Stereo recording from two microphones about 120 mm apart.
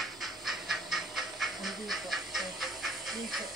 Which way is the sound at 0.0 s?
Centre (ahead or behind).